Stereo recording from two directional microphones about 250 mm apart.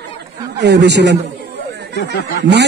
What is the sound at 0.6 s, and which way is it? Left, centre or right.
Speech, right.